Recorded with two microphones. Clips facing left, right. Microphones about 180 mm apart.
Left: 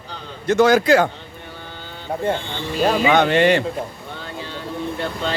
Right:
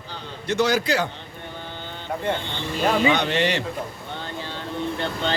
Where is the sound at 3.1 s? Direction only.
55° left (ahead or behind).